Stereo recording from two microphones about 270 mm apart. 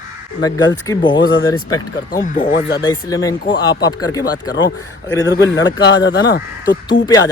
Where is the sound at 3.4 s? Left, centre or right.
Left.